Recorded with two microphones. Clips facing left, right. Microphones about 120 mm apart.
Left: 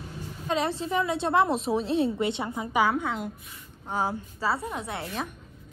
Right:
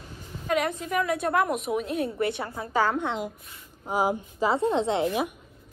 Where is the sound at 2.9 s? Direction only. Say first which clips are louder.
Right 1 dB; centre (ahead or behind).